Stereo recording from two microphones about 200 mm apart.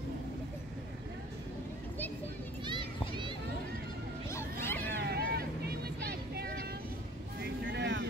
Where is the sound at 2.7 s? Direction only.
25° right (ahead or behind).